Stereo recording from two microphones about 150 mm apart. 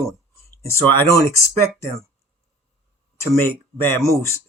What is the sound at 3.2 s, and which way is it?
Speech, 15° left (ahead or behind).